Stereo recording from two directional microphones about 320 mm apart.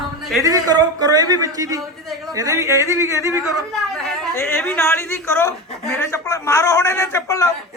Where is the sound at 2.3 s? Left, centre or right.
Centre.